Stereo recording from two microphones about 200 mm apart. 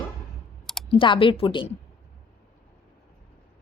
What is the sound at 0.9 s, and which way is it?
Speech, 25° left (ahead or behind).